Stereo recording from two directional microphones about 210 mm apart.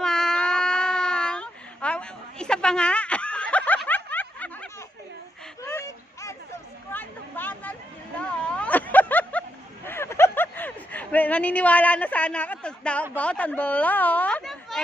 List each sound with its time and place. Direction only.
0.0 s baby cry: 5° left (ahead or behind)
5.6 s a sound: 15° left (ahead or behind)
13.1 s speech: 5° left (ahead or behind)